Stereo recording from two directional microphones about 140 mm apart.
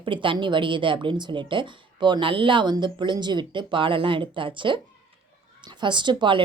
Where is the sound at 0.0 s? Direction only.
35° right (ahead or behind).